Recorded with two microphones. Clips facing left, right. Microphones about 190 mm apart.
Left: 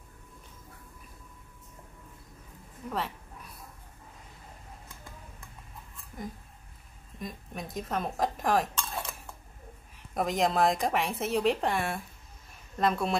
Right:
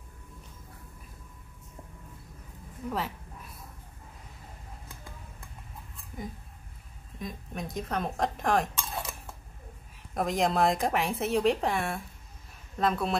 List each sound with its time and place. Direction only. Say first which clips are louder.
2.9 s a sound: right 1 dB; centre (ahead or behind)
7.2 s speech: right 2 dB; centre (ahead or behind)
8.7 s cutlery: even; 20° right (ahead or behind)
10.1 s speech: even; centre (ahead or behind)